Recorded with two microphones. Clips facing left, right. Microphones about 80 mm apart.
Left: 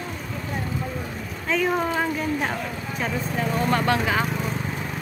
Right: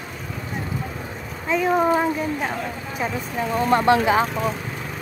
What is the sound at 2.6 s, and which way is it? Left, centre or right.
Speech, centre.